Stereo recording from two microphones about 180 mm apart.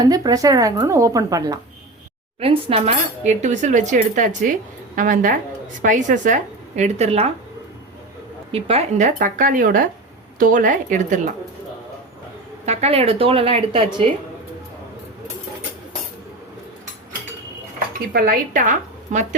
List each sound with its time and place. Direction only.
0.0 s a woman's voice: 20° right (ahead or behind)
2.4 s cutlery: 30° right (ahead or behind)
4.9 s speech: 45° right (ahead or behind)
5.8 s cutlery: 45° right (ahead or behind)
8.5 s speech: 35° right (ahead or behind)
12.6 s cutlery: 35° right (ahead or behind)
18.1 s speech: 50° right (ahead or behind)